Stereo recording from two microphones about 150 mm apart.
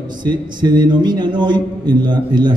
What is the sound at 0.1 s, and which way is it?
A man's voice, 30° right (ahead or behind).